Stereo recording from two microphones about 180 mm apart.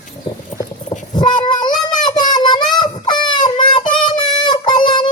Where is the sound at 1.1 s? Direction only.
25° left (ahead or behind).